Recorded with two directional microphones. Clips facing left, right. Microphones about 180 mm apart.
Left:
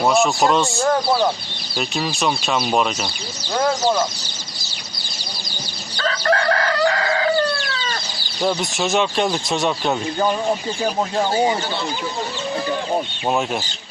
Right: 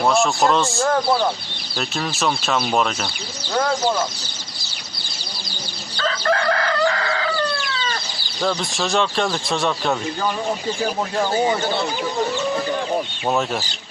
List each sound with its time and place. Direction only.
0.0 s a man's voice: centre (ahead or behind)
2.1 s a man's voice: centre (ahead or behind)
2.5 s speech: 15° left (ahead or behind)
6.0 s chicken: 35° left (ahead or behind)
8.4 s a man's voice: 15° left (ahead or behind)
9.3 s speech: 20° left (ahead or behind)
11.1 s speech: 25° left (ahead or behind)